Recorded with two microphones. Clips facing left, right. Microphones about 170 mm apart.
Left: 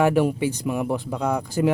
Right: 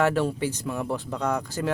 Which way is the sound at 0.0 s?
15° left (ahead or behind).